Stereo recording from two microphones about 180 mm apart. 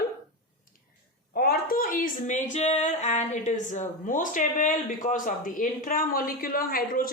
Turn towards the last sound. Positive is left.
turn(degrees=55)  # may be behind; listen again after turning